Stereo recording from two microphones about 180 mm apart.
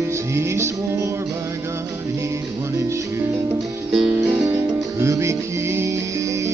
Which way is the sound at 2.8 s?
15° right (ahead or behind).